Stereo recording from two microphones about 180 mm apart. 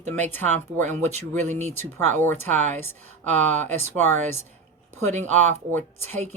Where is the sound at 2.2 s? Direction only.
10° left (ahead or behind).